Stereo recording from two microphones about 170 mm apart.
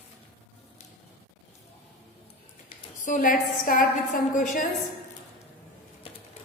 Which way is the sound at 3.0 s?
50° left (ahead or behind).